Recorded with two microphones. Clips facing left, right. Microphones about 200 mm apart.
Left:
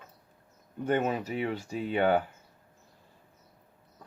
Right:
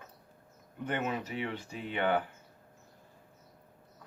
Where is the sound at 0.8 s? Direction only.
40° left (ahead or behind).